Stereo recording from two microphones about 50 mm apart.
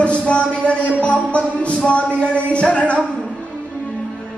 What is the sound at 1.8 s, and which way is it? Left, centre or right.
Speech, left.